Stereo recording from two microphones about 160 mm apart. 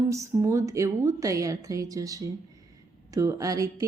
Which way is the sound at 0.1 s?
20° right (ahead or behind).